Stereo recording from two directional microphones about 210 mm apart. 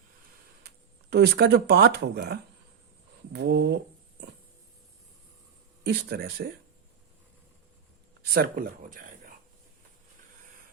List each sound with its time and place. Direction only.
1.1 s speech: 50° right (ahead or behind)
5.8 s speech: 50° right (ahead or behind)
8.2 s speech: 45° right (ahead or behind)